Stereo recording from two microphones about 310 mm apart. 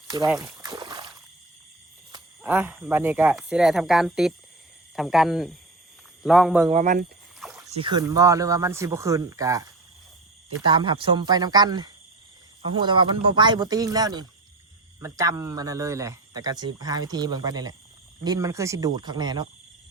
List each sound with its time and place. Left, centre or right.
0.3 s a sound: centre
2.1 s speech: centre
6.7 s speech: right
7.4 s rowboat: centre
7.8 s speech: centre
10.7 s speech: centre